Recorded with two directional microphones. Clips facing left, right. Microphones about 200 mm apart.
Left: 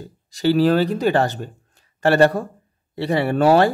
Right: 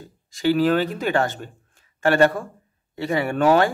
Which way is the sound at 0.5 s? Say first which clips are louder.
Left 3 dB; 35° left (ahead or behind).